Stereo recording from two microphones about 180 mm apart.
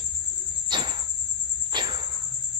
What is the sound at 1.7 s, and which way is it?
Cricket, 25° right (ahead or behind).